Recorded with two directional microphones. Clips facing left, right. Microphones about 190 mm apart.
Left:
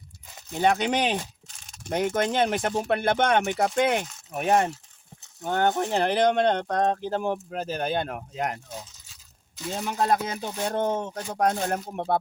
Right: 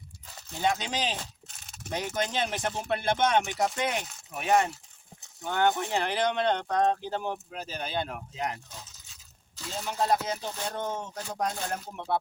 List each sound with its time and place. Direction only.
0.6 s speech: 60° left (ahead or behind)
10.0 s speech: 55° left (ahead or behind)